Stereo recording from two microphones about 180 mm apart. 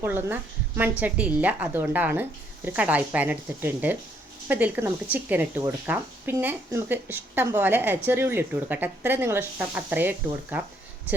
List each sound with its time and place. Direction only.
0.0 s a woman's voice: 10° right (ahead or behind)